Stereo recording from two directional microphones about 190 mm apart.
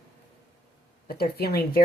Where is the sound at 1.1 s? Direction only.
55° left (ahead or behind).